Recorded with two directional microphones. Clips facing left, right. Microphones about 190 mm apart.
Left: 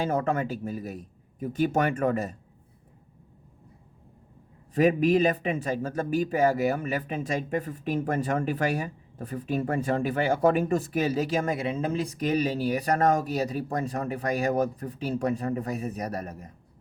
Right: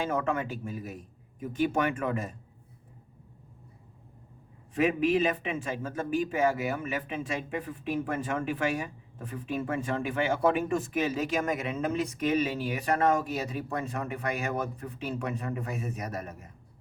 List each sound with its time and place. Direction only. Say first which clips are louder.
0.0 s a man's voice: left 3 dB; 35° left (ahead or behind)
4.7 s a man's voice: left 4 dB; 40° left (ahead or behind)